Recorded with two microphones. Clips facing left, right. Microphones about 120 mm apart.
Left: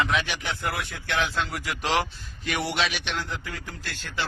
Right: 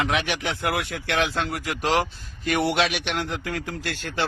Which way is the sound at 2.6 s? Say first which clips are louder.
Right 5 dB; 55° right (ahead or behind).